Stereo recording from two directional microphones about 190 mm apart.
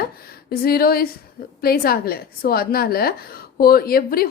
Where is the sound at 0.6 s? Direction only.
55° left (ahead or behind).